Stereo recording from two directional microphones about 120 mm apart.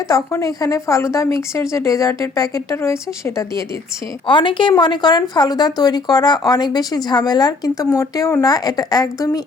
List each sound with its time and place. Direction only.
0.1 s speech: 25° left (ahead or behind)
4.3 s speech: 40° left (ahead or behind)